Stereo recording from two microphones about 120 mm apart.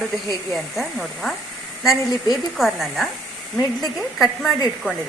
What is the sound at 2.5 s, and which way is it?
Speech, centre (ahead or behind).